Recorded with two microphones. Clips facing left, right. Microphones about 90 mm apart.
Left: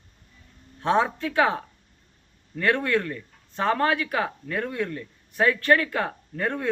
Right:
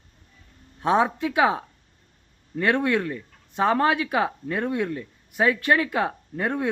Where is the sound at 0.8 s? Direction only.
15° right (ahead or behind).